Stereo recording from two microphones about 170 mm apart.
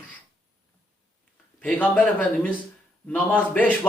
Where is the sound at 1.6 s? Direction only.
10° left (ahead or behind).